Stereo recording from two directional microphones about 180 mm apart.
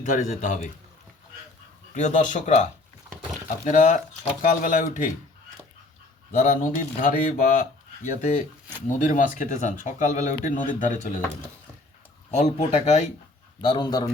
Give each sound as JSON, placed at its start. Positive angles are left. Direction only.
{"t": 0.0, "sound": "speech", "side_deg": 45}
{"t": 1.9, "sound": "speech", "side_deg": 40}
{"t": 3.7, "sound": "speech", "side_deg": 45}
{"t": 6.3, "sound": "speech", "side_deg": 45}
{"t": 12.3, "sound": "speech", "side_deg": 40}
{"t": 13.6, "sound": "a man's voice", "side_deg": 25}